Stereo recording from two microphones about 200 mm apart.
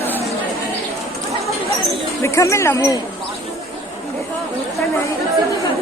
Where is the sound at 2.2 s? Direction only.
15° left (ahead or behind).